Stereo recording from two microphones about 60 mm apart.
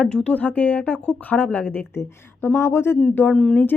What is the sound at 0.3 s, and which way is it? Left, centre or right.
A woman's voice, left.